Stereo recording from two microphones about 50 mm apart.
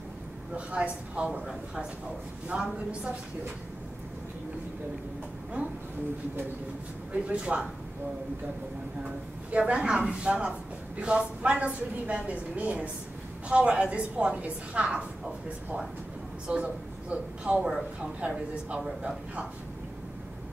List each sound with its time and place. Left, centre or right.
0.6 s a woman's voice: right
7.1 s a woman's voice: right
9.0 s a woman's voice: right
16.4 s a woman's voice: right
18.8 s a man's voice: centre